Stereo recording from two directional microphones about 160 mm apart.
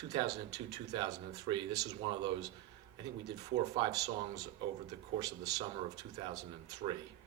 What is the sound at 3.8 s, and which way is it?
Speech, 20° right (ahead or behind).